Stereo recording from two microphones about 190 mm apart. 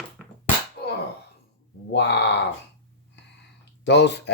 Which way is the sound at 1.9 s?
65° left (ahead or behind).